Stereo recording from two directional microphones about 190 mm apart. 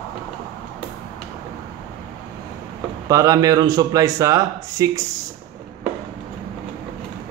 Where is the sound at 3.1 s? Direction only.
20° right (ahead or behind).